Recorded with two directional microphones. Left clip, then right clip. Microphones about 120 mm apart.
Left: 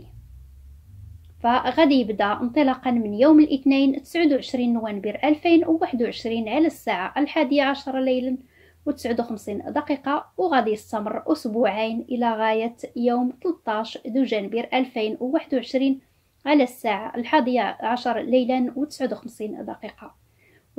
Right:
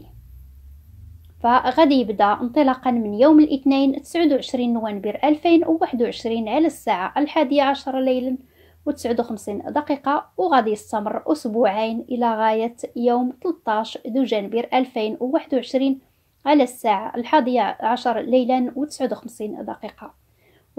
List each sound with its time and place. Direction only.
1.4 s a woman's voice: 35° right (ahead or behind)